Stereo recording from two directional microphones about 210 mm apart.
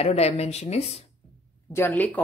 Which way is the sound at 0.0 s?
30° left (ahead or behind).